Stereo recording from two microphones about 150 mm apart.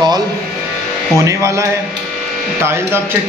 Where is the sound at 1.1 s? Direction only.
20° right (ahead or behind).